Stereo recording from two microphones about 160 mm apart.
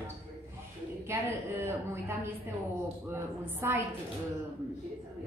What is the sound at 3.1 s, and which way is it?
Speech, 15° right (ahead or behind).